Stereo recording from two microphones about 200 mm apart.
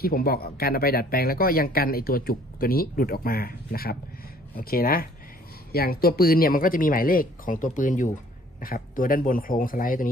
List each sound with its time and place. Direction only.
0.0 s speech: 50° left (ahead or behind)